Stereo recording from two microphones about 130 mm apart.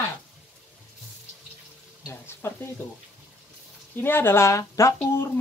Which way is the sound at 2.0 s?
20° left (ahead or behind).